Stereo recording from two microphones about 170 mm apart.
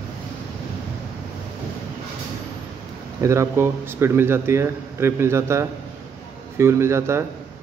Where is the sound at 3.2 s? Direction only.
15° right (ahead or behind).